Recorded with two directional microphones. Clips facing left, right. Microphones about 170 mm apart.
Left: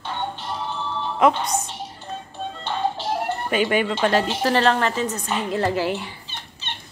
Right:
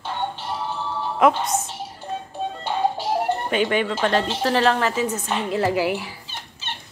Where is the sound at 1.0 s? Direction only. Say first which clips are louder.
Even; 5° right (ahead or behind).